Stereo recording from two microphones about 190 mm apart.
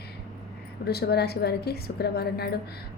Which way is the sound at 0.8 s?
55° left (ahead or behind).